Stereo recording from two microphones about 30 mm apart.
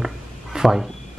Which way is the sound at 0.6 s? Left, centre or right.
Centre.